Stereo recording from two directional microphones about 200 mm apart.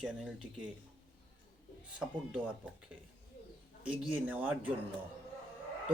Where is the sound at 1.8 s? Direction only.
5° right (ahead or behind).